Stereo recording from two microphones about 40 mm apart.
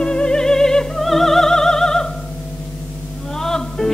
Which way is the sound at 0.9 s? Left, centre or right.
Centre.